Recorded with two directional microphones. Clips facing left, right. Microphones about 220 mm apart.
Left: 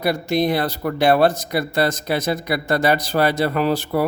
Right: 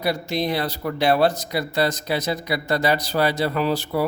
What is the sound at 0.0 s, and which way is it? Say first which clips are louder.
A man's voice: left 4 dB; 50° left (ahead or behind).